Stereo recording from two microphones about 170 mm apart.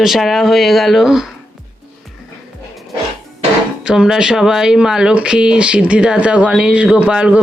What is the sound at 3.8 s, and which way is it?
Speech, 5° right (ahead or behind).